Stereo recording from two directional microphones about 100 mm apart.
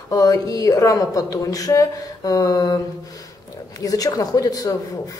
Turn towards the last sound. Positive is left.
turn(degrees=35)  # may be behind; listen again after turning